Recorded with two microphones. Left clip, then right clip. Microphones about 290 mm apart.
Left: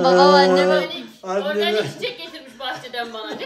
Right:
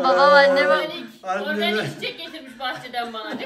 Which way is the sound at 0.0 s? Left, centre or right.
Centre.